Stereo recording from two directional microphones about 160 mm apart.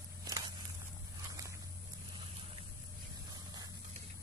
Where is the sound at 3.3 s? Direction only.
25° right (ahead or behind).